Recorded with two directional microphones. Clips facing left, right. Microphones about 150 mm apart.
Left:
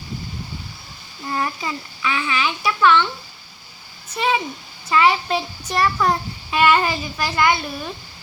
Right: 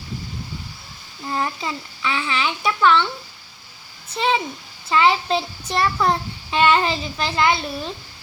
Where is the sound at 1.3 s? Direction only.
25° right (ahead or behind).